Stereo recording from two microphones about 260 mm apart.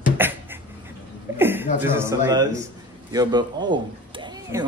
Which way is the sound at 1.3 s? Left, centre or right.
Centre.